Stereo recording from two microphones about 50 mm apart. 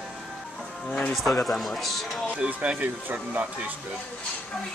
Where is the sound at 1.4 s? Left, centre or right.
Centre.